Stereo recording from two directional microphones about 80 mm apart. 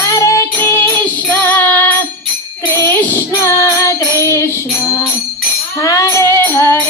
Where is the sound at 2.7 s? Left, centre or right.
Left.